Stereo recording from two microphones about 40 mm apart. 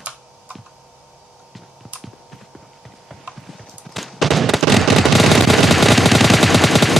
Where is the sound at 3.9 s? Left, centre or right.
Centre.